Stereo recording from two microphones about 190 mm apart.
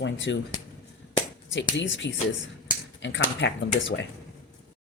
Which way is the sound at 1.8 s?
70° left (ahead or behind).